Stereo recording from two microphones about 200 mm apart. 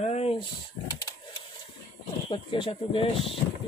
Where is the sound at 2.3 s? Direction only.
25° left (ahead or behind).